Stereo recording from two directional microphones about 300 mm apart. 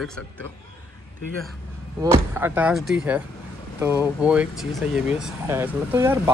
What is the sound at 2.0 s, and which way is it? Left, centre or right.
Speech, centre.